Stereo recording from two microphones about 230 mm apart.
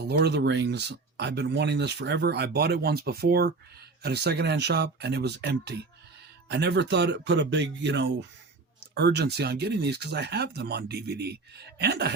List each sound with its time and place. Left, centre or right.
0.1 s speech: right